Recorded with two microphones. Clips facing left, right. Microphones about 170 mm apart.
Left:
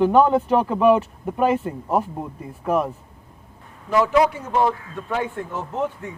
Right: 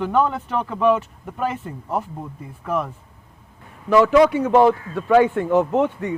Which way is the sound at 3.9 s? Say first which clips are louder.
Right 4 dB; 75° right (ahead or behind).